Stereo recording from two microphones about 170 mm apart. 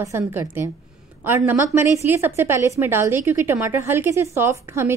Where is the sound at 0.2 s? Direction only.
10° right (ahead or behind).